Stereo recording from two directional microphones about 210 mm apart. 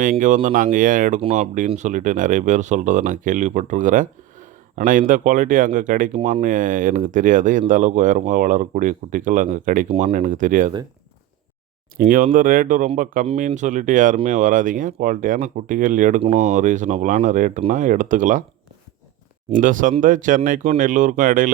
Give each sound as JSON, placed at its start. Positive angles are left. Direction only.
{"t": 0.0, "sound": "speech", "side_deg": -40}
{"t": 11.9, "sound": "speech", "side_deg": -40}
{"t": 19.5, "sound": "speech", "side_deg": -40}